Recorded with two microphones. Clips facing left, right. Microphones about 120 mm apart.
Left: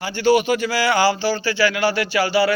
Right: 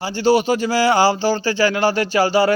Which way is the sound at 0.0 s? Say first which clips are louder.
Right 1 dB; 35° right (ahead or behind).